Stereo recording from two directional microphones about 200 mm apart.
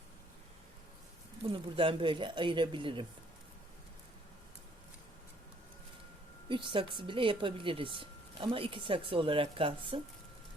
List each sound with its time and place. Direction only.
1.7 s a woman's voice: 25° right (ahead or behind)
6.5 s a woman's voice: 25° right (ahead or behind)